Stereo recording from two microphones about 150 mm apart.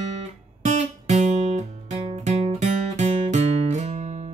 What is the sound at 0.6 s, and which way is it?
Guitar, 50° right (ahead or behind).